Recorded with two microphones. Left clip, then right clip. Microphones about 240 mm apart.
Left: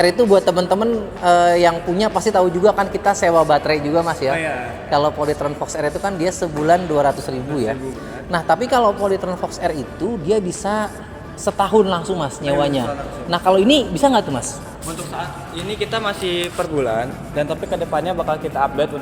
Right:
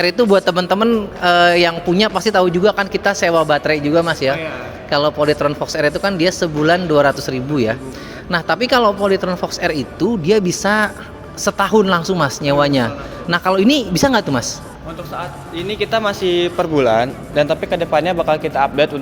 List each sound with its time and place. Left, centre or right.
0.0 s speech: right
15.7 s speech: right